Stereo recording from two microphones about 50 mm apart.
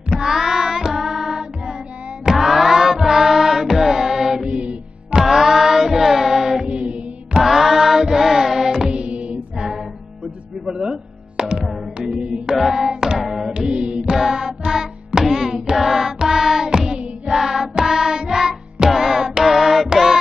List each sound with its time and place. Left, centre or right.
0.1 s child singing: centre
2.2 s music: centre
4.5 s music: right
5.2 s music: centre
7.4 s music: centre; by 9.4 s right
10.6 s music: centre
13.2 s music: centre
13.5 s music: centre
14.1 s music: centre